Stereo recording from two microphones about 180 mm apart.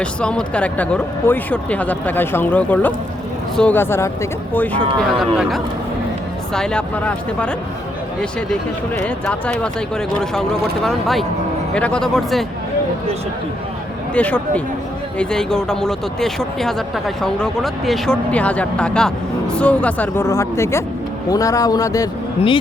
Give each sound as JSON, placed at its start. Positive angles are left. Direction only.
{"t": 0.0, "sound": "speech", "side_deg": 5}
{"t": 9.0, "sound": "speech", "side_deg": 5}
{"t": 14.1, "sound": "speech", "side_deg": 5}